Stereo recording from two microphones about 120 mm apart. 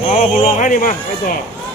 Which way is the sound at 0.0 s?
60° left (ahead or behind).